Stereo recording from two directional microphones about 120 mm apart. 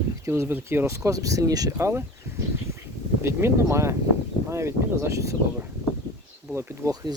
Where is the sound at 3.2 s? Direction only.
20° right (ahead or behind).